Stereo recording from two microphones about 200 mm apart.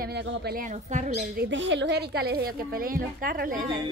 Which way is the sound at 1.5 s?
65° right (ahead or behind).